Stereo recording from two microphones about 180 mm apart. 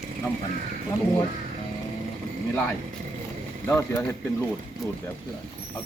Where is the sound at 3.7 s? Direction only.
15° left (ahead or behind).